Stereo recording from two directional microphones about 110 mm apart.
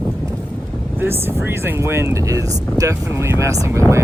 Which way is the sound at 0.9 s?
20° right (ahead or behind).